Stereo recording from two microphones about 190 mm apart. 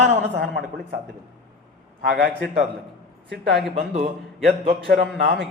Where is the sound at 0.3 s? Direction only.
60° right (ahead or behind).